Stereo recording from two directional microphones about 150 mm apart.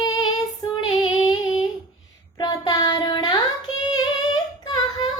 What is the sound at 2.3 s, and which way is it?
Child singing, 25° left (ahead or behind).